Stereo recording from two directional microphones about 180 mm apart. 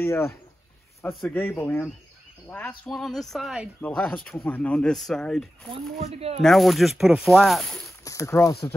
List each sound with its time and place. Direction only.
0.0 s speech: 15° left (ahead or behind)
5.9 s speech: 35° right (ahead or behind)
6.4 s speech: centre (ahead or behind)
8.0 s speech: 15° left (ahead or behind)